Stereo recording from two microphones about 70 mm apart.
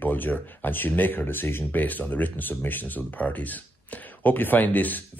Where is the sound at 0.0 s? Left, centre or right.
Left.